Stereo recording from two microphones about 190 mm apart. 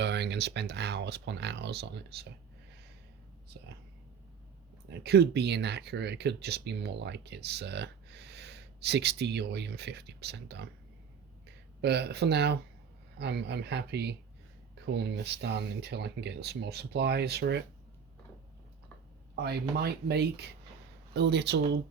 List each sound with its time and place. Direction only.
0.0 s speech: 65° right (ahead or behind)
4.9 s speech: 60° right (ahead or behind)
19.4 s speech: 60° right (ahead or behind)